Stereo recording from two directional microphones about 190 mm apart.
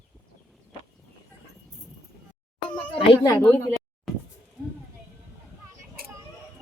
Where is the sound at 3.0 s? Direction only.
20° left (ahead or behind).